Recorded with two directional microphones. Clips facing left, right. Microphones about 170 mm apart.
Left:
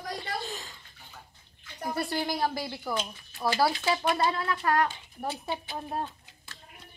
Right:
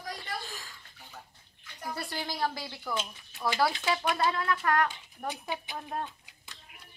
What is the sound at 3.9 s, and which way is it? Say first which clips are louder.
Speech: left 2 dB; 20° left (ahead or behind).